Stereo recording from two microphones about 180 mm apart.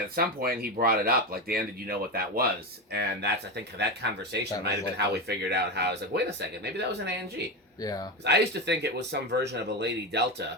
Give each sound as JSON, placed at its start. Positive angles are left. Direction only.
{"t": 0.2, "sound": "speech", "side_deg": -55}
{"t": 2.9, "sound": "speech", "side_deg": -65}
{"t": 8.2, "sound": "speech", "side_deg": -70}